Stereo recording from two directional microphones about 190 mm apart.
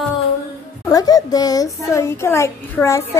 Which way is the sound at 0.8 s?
20° left (ahead or behind).